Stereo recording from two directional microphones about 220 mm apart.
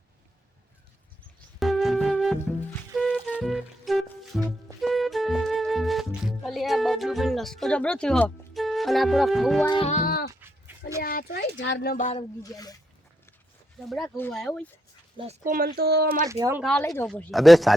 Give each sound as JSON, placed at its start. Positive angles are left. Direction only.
{"t": 1.5, "sound": "music", "side_deg": 0}
{"t": 9.6, "sound": "music", "side_deg": 20}
{"t": 9.9, "sound": "child singing", "side_deg": 40}
{"t": 10.4, "sound": "dog", "side_deg": -10}
{"t": 11.0, "sound": "a sound", "side_deg": 40}
{"t": 12.4, "sound": "speech", "side_deg": 15}
{"t": 13.7, "sound": "speech", "side_deg": 0}
{"t": 15.2, "sound": "speech", "side_deg": -35}
{"t": 16.3, "sound": "speech", "side_deg": -10}
{"t": 16.9, "sound": "speech", "side_deg": 5}